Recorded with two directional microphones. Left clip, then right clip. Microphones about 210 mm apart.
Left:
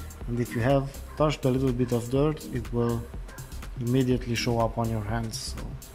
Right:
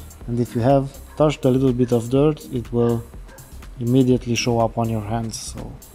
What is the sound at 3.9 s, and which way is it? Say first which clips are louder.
Speech: right 8 dB; 15° right (ahead or behind).